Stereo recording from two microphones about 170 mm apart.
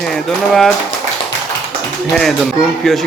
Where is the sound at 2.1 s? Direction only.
Centre (ahead or behind).